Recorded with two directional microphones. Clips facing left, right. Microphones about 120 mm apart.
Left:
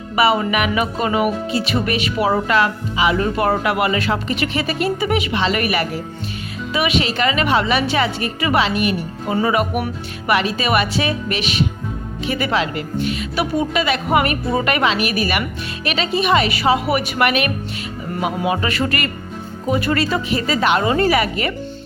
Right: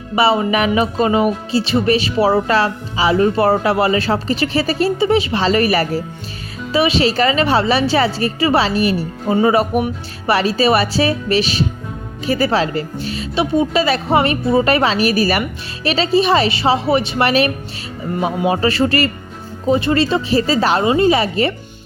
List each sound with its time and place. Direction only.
0.2 s speech: 30° right (ahead or behind)
20.8 s speech: 20° right (ahead or behind)